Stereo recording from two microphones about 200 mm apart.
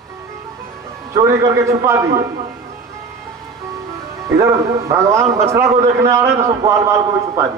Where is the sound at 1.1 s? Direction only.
15° right (ahead or behind).